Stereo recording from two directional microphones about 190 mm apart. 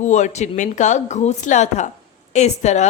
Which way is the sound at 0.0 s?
40° left (ahead or behind).